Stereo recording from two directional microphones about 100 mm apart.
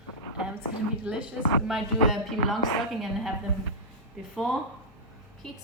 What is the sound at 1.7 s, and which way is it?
A woman's voice, centre (ahead or behind).